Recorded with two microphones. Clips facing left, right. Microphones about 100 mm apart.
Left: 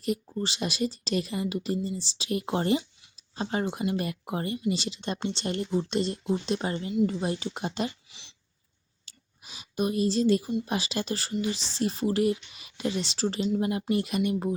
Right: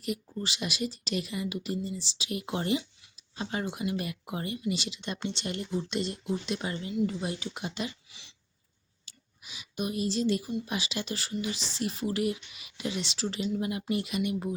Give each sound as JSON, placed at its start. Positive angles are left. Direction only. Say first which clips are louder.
{"t": 0.0, "sound": "speech", "louder": "left 4 dB", "side_deg": 35}
{"t": 8.1, "sound": "a sound", "louder": "left 1 dB", "side_deg": 25}
{"t": 9.0, "sound": "speech", "louder": "left 1 dB", "side_deg": 40}